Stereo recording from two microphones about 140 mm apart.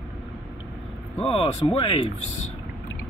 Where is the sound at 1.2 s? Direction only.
45° left (ahead or behind).